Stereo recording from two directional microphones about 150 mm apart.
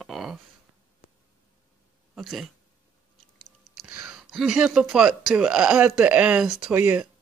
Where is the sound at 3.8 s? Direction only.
5° right (ahead or behind).